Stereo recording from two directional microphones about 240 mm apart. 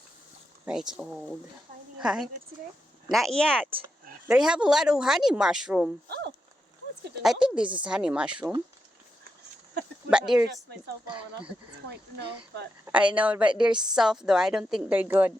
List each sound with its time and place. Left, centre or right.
0.6 s speech: centre
7.2 s speech: centre
10.1 s speech: centre
11.0 s speech: centre
12.8 s a sound: centre
13.1 s a woman's voice: centre